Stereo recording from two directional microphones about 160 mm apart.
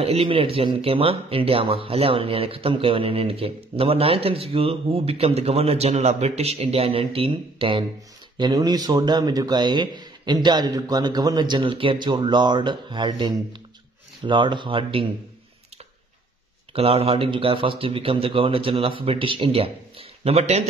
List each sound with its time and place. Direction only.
0.0 s speech: 35° right (ahead or behind)
16.7 s speech: 40° right (ahead or behind)